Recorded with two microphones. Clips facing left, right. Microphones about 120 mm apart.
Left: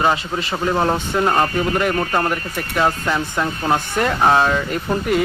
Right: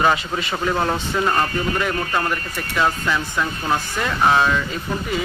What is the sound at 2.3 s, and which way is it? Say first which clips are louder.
Speech: left 2 dB; 50° left (ahead or behind).